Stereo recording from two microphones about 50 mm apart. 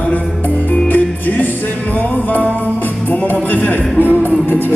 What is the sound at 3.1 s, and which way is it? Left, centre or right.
Music, left.